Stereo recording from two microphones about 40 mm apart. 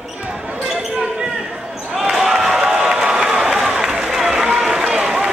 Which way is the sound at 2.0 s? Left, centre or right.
Centre.